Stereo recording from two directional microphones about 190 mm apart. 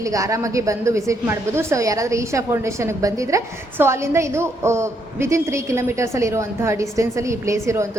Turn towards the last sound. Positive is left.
turn(degrees=-15)  # may be behind; listen again after turning